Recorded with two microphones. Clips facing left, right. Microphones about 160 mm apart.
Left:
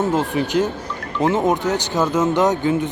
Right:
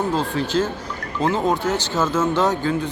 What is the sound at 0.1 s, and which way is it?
Speech, 20° left (ahead or behind).